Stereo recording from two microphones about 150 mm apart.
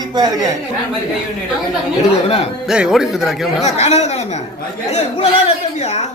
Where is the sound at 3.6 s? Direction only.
45° left (ahead or behind).